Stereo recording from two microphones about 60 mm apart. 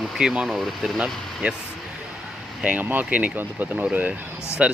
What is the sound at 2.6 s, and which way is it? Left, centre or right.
Speech, centre.